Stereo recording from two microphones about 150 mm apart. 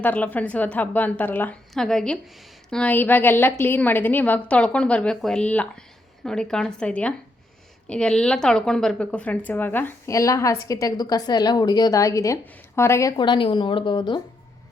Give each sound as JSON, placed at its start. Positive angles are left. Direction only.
{"t": 0.0, "sound": "a woman's voice", "side_deg": 10}
{"t": 13.1, "sound": "a woman's voice", "side_deg": 30}